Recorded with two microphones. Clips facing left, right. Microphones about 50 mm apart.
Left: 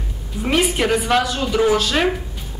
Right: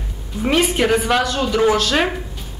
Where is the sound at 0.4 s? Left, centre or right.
Centre.